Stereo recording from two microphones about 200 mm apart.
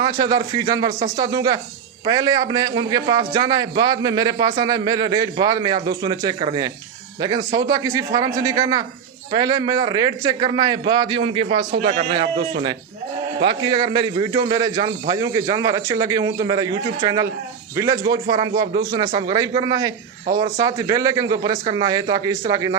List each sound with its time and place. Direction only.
0.0 s a man's voice: 20° right (ahead or behind)
13.4 s a man's voice: 20° right (ahead or behind)